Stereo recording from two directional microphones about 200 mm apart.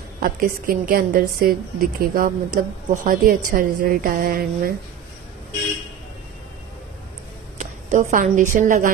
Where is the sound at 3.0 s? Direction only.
45° right (ahead or behind).